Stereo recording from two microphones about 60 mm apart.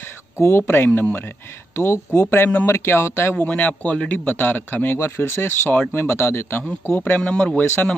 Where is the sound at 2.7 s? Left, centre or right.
Left.